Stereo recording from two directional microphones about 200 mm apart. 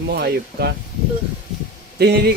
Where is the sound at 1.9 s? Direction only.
55° right (ahead or behind).